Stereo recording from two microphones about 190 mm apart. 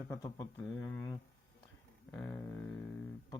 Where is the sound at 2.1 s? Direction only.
5° left (ahead or behind).